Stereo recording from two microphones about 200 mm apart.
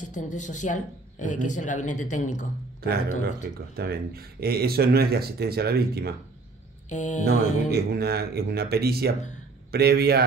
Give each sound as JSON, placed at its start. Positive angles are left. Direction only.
{"t": 0.0, "sound": "a man's voice", "side_deg": 40}
{"t": 3.7, "sound": "speech", "side_deg": -50}
{"t": 6.9, "sound": "a man's voice", "side_deg": 35}
{"t": 7.2, "sound": "speech", "side_deg": -50}